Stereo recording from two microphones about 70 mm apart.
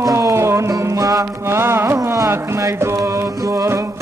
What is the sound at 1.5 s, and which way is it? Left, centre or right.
Carnatic music, right.